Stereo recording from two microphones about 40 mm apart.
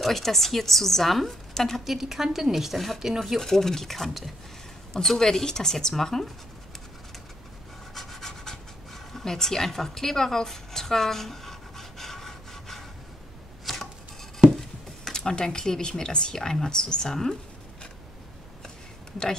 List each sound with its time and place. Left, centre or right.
0.0 s a woman's voice: centre
1.9 s a woman's voice: centre
3.3 s speech: centre
7.9 s pant: centre
13.7 s chopping: centre
15.0 s speech: centre